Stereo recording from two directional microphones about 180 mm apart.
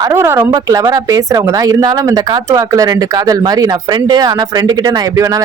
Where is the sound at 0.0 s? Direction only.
15° right (ahead or behind).